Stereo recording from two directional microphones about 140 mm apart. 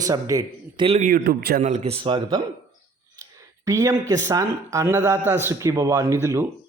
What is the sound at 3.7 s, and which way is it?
Speech, 20° right (ahead or behind).